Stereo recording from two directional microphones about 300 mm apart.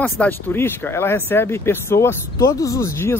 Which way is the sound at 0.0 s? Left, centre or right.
Centre.